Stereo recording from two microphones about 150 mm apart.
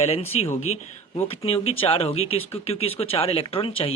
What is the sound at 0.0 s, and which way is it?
Speech, 45° left (ahead or behind).